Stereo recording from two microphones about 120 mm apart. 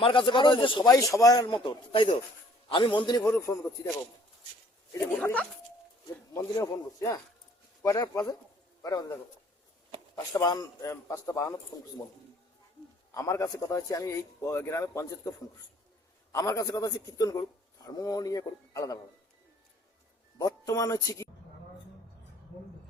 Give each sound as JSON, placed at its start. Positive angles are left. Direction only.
{"t": 0.0, "sound": "speech", "side_deg": 45}
{"t": 0.9, "sound": "a man's voice", "side_deg": 30}
{"t": 3.2, "sound": "a man's voice", "side_deg": 20}
{"t": 5.2, "sound": "speech", "side_deg": 10}
{"t": 6.3, "sound": "a man's voice", "side_deg": 30}
{"t": 10.3, "sound": "a man's voice", "side_deg": 30}
{"t": 13.1, "sound": "a man's voice", "side_deg": 25}
{"t": 16.3, "sound": "a man's voice", "side_deg": 30}
{"t": 20.4, "sound": "a man's voice", "side_deg": 30}